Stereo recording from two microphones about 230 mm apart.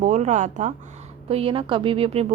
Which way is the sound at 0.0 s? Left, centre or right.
Right.